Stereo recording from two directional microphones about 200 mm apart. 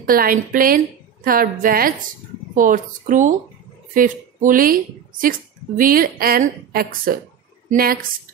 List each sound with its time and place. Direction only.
0.0 s a woman's voice: 45° right (ahead or behind)